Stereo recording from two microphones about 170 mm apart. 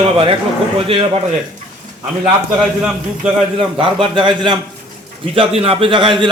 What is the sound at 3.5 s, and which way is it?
A man's voice, 30° right (ahead or behind).